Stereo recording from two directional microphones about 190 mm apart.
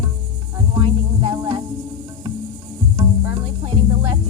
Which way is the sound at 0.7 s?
25° right (ahead or behind).